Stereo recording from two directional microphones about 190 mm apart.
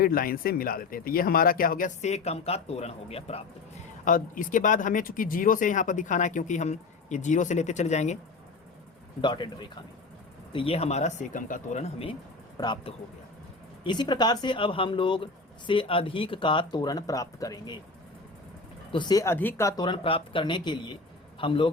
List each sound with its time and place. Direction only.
0.0 s speech: 50° left (ahead or behind); by 3.4 s 30° left (ahead or behind)
4.0 s speech: 45° left (ahead or behind)
9.2 s speech: 25° left (ahead or behind)
18.9 s speech: 25° left (ahead or behind)